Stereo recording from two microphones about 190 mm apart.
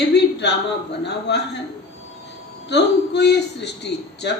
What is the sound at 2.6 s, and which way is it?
A man's voice, 60° left (ahead or behind).